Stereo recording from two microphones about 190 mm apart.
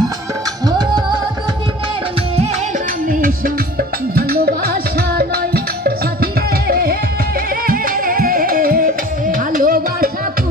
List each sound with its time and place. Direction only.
0.7 s music: 20° right (ahead or behind)
3.1 s music: 50° right (ahead or behind)